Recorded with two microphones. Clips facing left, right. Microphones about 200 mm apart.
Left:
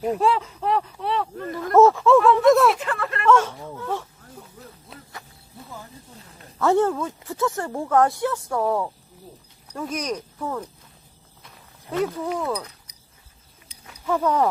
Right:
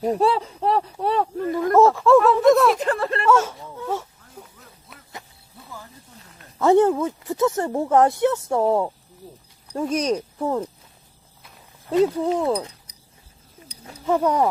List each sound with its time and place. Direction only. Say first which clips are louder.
0.0 s speech: right 2 dB; 35° right (ahead or behind)
1.7 s speech: even; centre (ahead or behind)
2.7 s a sound: right 5 dB; 35° right (ahead or behind)
3.2 s wail: left 2 dB; 10° right (ahead or behind)
4.9 s cricket: left 3 dB; 30° left (ahead or behind)
6.6 s speech: right 4 dB; 15° right (ahead or behind)
12.0 s speech: right 5 dB; 25° right (ahead or behind)